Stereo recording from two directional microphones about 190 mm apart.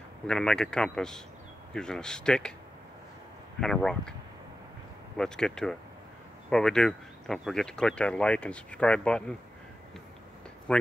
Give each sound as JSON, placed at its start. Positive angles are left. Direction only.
{"t": 0.3, "sound": "speech", "side_deg": 5}
{"t": 3.6, "sound": "speech", "side_deg": 5}
{"t": 5.1, "sound": "speech", "side_deg": 5}
{"t": 10.7, "sound": "speech", "side_deg": 5}